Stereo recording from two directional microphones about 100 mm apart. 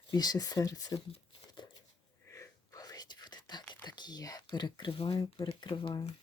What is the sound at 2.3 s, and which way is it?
Whispering, 35° left (ahead or behind).